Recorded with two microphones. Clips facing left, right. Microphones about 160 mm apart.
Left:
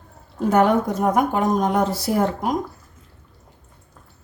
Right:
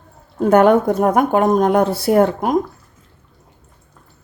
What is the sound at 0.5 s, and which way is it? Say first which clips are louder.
A woman's voice: right 6 dB; 60° right (ahead or behind).